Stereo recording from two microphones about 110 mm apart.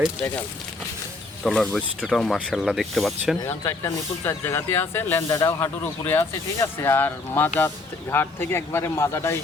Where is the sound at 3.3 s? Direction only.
30° left (ahead or behind).